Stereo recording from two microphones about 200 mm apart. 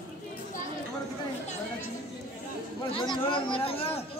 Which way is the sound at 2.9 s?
25° left (ahead or behind).